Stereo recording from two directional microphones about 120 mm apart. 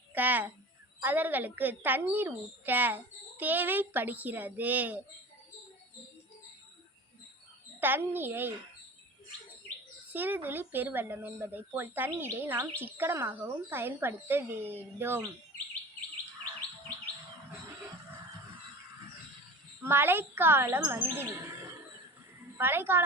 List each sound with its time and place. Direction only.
0.1 s a child's voice: 15° right (ahead or behind)
7.8 s a woman's voice: 15° right (ahead or behind)
10.1 s a woman's voice: 15° right (ahead or behind)
19.8 s speech: 20° right (ahead or behind)
22.5 s speech: 20° right (ahead or behind)